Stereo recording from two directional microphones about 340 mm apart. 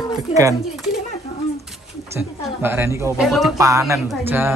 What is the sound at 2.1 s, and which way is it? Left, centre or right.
A woman's voice, centre.